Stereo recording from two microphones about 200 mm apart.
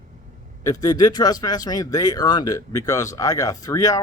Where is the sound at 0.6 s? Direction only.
15° left (ahead or behind).